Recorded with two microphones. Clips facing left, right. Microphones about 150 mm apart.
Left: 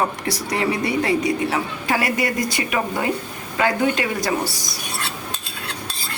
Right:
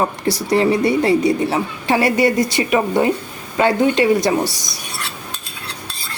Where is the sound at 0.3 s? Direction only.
30° right (ahead or behind).